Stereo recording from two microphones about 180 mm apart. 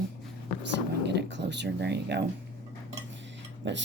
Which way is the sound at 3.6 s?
80° right.